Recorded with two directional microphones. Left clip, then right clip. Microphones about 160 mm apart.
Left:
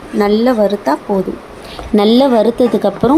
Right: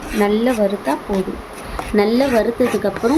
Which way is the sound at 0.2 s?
20° left (ahead or behind).